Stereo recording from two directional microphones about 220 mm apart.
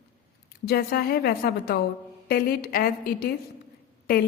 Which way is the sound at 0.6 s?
45° left (ahead or behind).